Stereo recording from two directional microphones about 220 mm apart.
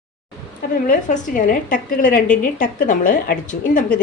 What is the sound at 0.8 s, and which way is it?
Speech, 35° left (ahead or behind).